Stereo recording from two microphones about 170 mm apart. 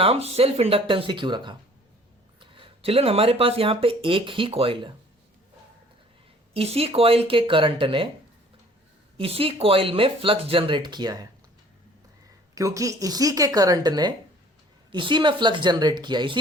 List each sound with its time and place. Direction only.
0.0 s speech: 35° right (ahead or behind)
6.5 s speech: 35° right (ahead or behind)
9.1 s speech: 35° right (ahead or behind)
12.5 s speech: 20° right (ahead or behind)